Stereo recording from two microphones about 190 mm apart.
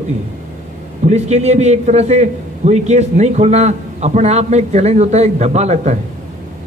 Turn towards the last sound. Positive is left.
turn(degrees=-35)  # may be behind; listen again after turning